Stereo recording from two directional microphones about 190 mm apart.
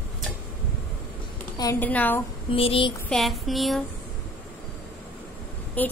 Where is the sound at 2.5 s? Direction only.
30° left (ahead or behind).